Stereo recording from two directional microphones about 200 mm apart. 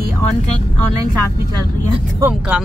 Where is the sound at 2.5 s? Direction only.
10° right (ahead or behind).